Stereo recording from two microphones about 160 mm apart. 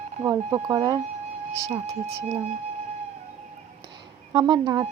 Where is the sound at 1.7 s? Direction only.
40° right (ahead or behind).